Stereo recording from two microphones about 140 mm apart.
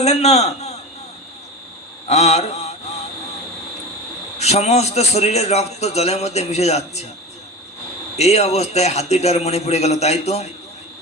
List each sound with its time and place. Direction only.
0.0 s a man's voice: 50° left (ahead or behind)
2.0 s mantra: 50° left (ahead or behind)
4.4 s a man's voice: 50° left (ahead or behind)
8.1 s a man's voice: 50° left (ahead or behind)